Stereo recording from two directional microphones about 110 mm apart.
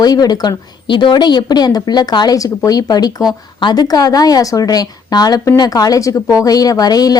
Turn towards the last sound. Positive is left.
turn(degrees=35)  # may be behind; listen again after turning